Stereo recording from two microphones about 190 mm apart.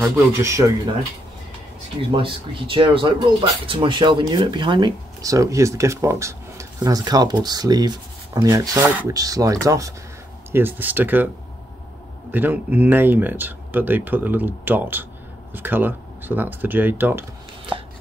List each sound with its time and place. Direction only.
0.0 s speech: 15° right (ahead or behind)
2.1 s speech: 25° right (ahead or behind); by 11.2 s 10° right (ahead or behind)
12.3 s speech: 10° right (ahead or behind)